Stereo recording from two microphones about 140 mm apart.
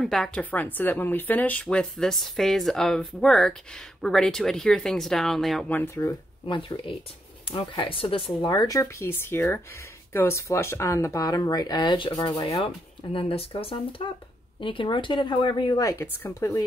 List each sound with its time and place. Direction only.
0.0 s speech: centre (ahead or behind)
5.7 s speech: 15° left (ahead or behind)
6.4 s speech: 35° left (ahead or behind)
8.4 s speech: 30° left (ahead or behind)